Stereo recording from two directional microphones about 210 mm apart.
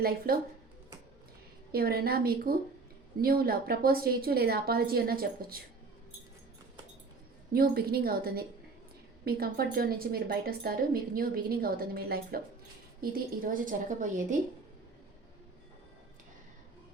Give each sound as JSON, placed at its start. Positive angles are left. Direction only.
{"t": 0.0, "sound": "a woman's voice", "side_deg": -45}
{"t": 1.7, "sound": "a woman's voice", "side_deg": -45}
{"t": 7.5, "sound": "a woman's voice", "side_deg": -45}